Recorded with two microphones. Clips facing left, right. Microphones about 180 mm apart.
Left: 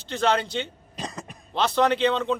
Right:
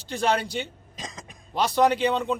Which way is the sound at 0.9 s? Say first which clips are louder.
Left 5 dB; 65° left (ahead or behind).